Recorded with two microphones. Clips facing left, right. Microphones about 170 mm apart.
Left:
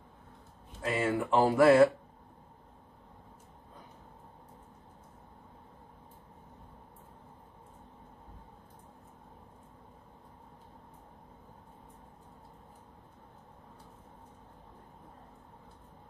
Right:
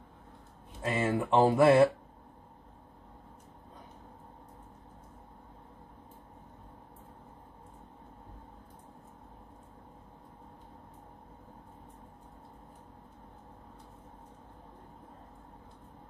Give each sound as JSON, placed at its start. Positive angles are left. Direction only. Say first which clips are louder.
{"t": 0.8, "sound": "speech", "louder": "even", "side_deg": -20}